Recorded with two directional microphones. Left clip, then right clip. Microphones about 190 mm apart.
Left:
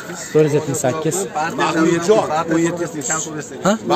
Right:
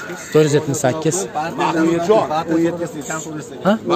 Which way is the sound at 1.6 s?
65° left (ahead or behind).